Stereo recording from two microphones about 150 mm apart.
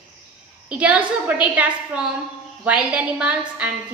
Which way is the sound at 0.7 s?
10° right (ahead or behind).